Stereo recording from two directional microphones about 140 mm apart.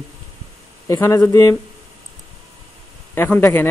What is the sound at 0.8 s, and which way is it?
Speech, 25° left (ahead or behind).